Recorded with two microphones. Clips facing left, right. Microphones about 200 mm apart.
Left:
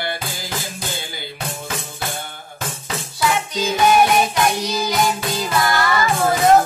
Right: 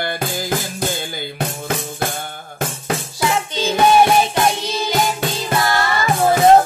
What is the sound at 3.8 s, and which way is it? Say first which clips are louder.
Music: right 2 dB; 30° right (ahead or behind).